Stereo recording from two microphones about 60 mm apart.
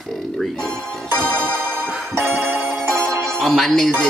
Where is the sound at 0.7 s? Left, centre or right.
Right.